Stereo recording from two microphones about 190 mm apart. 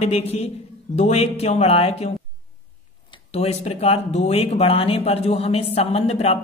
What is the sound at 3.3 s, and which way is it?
Speech, 35° left (ahead or behind).